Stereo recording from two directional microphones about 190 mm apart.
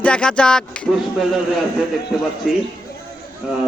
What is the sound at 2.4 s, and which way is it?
Speech, centre (ahead or behind).